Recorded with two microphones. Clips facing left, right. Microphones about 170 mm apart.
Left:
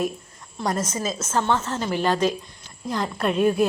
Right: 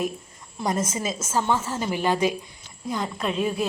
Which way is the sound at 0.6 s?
5° right (ahead or behind).